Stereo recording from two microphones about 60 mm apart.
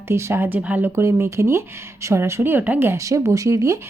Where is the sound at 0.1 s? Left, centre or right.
Right.